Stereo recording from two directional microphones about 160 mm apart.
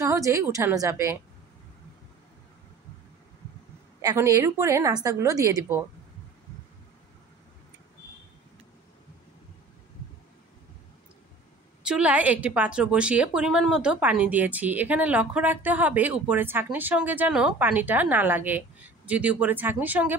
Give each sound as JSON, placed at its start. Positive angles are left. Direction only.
{"t": 0.0, "sound": "a woman's voice", "side_deg": -20}
{"t": 4.0, "sound": "speech", "side_deg": -20}
{"t": 11.8, "sound": "a woman's voice", "side_deg": -5}